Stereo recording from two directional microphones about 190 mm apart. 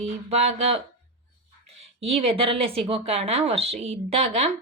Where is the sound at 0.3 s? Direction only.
35° right (ahead or behind).